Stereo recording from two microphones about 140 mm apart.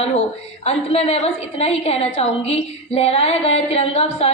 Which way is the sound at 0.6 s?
45° left (ahead or behind).